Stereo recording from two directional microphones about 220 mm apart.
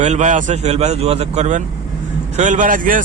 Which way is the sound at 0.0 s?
35° right (ahead or behind).